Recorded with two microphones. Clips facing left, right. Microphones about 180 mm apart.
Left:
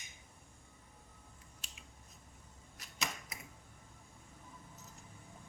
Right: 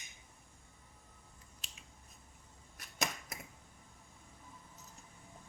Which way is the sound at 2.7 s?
50° right (ahead or behind).